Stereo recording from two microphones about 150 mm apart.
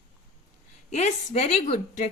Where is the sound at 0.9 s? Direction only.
50° left (ahead or behind).